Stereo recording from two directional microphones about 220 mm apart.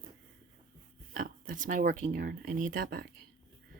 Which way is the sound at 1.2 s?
35° right (ahead or behind).